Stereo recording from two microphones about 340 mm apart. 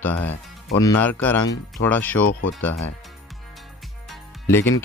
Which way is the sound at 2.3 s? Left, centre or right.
Left.